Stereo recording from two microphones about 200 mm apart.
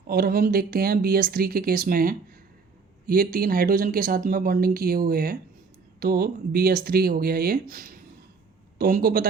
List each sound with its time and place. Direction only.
0.1 s speech: 50° right (ahead or behind)